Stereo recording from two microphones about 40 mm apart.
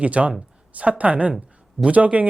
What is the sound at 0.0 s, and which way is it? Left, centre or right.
Speech, right.